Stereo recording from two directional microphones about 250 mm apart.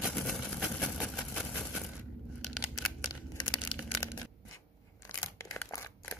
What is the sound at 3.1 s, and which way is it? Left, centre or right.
Crumpling, centre.